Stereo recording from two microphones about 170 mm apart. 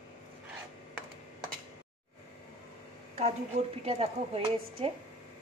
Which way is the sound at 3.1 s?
35° right (ahead or behind).